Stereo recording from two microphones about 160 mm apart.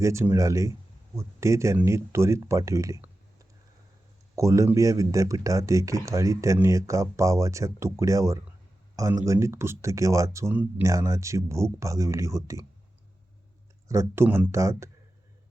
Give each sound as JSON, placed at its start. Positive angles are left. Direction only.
{"t": 0.0, "sound": "speech", "side_deg": -15}
{"t": 4.4, "sound": "speech", "side_deg": -20}
{"t": 13.8, "sound": "speech", "side_deg": -20}